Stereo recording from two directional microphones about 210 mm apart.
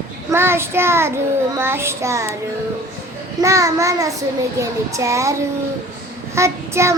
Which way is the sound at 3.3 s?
15° right (ahead or behind).